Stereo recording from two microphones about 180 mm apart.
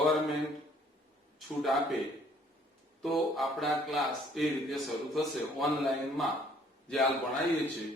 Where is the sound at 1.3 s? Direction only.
Centre (ahead or behind).